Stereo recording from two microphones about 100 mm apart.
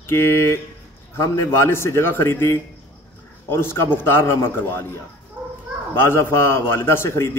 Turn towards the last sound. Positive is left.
turn(degrees=25)  # may be behind; listen again after turning